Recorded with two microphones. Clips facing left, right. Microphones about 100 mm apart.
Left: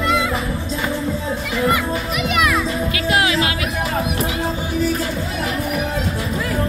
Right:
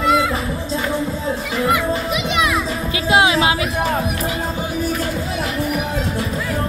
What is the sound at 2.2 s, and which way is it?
Music, 25° right (ahead or behind).